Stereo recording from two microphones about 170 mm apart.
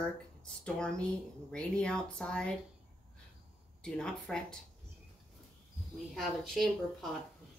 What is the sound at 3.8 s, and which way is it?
Speech, 5° left (ahead or behind).